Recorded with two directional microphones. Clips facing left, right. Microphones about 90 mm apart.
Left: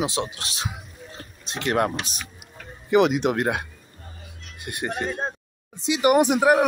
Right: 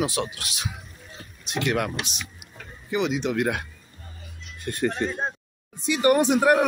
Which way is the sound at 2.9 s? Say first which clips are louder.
Left 6 dB; 55° left (ahead or behind).